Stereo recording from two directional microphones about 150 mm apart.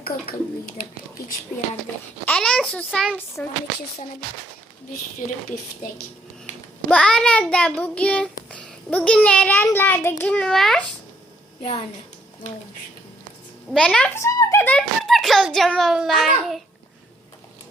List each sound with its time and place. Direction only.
0.0 s speech: 80° left
2.2 s a child's voice: 5° left (ahead or behind)
3.4 s child singing: 10° left (ahead or behind)
6.9 s child singing: 5° left (ahead or behind)
8.4 s a child's voice: 10° left (ahead or behind)
9.6 s child singing: 15° left (ahead or behind)
11.6 s a woman's voice: 45° left (ahead or behind)
13.7 s a child's voice: 5° left (ahead or behind)
14.2 s a child's voice: 20° left (ahead or behind); by 16.3 s centre (ahead or behind)